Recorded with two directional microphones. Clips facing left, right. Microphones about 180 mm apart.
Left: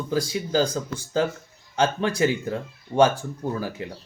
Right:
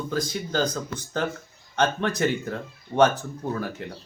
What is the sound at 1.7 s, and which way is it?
Speech, 10° left (ahead or behind).